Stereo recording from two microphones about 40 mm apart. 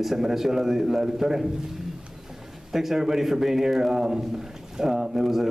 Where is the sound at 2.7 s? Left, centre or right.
Centre.